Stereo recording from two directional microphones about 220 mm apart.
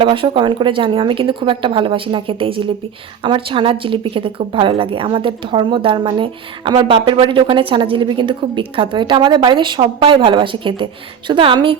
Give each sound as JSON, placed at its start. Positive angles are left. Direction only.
{"t": 0.0, "sound": "speech", "side_deg": -20}